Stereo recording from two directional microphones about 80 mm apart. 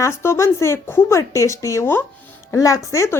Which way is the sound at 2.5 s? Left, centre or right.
Left.